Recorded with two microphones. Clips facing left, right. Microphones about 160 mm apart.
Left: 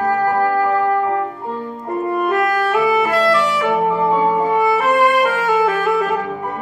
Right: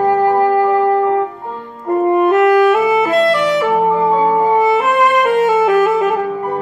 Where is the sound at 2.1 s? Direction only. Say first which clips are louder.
Right 7 dB; 25° right (ahead or behind).